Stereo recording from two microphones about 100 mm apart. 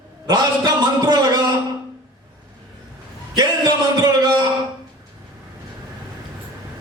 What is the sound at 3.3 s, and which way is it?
A man's voice, 45° right (ahead or behind).